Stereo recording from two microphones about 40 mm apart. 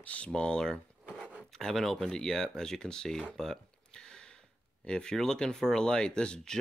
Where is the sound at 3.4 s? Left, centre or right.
Centre.